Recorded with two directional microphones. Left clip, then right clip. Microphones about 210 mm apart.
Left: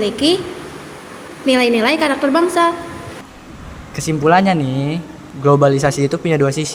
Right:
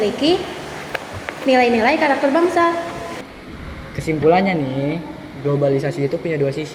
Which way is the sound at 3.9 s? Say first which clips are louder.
Left 2 dB; 60° left (ahead or behind).